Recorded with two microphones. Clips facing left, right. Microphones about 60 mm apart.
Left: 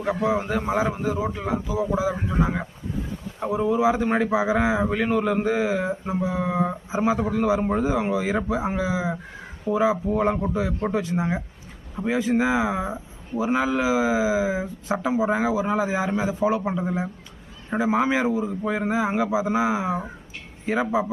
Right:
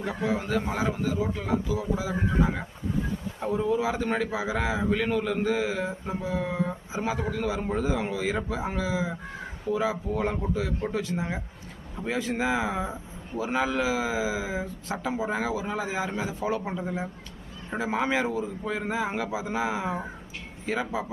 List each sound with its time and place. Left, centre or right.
0.0 s a man's voice: centre